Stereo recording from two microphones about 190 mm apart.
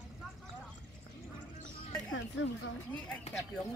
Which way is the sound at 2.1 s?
75° left (ahead or behind).